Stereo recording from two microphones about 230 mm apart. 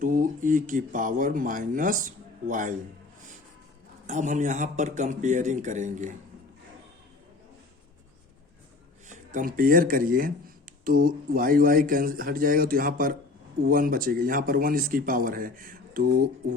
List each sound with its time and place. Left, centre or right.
0.0 s speech: right
4.0 s speech: right
9.0 s speech: right